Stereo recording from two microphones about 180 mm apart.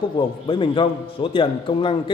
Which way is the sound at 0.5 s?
30° left (ahead or behind).